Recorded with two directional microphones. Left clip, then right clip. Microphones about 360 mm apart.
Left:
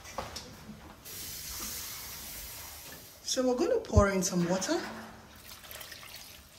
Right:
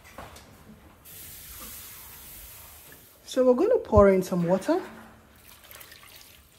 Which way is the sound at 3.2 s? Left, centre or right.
Centre.